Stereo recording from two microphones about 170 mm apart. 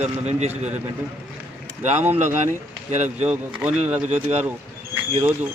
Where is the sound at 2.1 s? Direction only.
45° right (ahead or behind).